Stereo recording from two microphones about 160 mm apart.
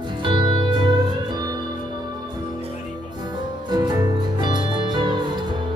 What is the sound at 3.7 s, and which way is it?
Music, 25° right (ahead or behind).